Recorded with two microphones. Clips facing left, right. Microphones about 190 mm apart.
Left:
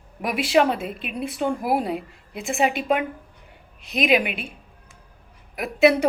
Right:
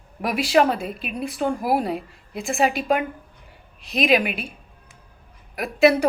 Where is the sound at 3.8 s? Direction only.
20° left (ahead or behind).